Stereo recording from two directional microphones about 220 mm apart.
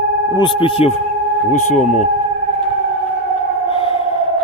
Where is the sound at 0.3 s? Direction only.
20° left (ahead or behind).